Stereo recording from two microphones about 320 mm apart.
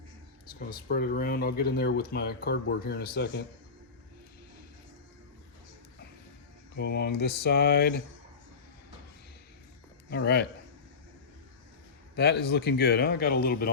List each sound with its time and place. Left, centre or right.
0.9 s speech: left
6.7 s speech: left
10.1 s speech: left
12.1 s speech: left